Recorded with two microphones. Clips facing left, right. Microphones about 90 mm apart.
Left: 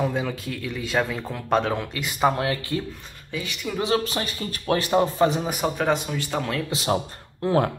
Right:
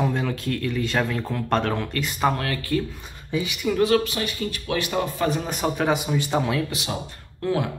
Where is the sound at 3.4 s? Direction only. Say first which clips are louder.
Right 4 dB; 10° right (ahead or behind).